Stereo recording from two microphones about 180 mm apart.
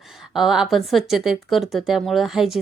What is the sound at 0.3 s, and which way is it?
Speech, centre (ahead or behind).